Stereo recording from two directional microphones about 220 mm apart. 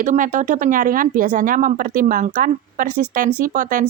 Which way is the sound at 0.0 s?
35° right (ahead or behind).